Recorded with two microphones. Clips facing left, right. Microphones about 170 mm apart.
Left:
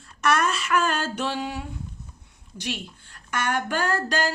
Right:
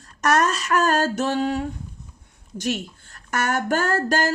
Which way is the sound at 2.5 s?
45° right (ahead or behind).